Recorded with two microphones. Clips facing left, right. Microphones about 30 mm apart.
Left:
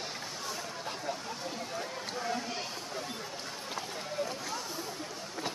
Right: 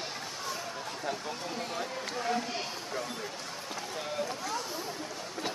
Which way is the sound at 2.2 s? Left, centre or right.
Centre.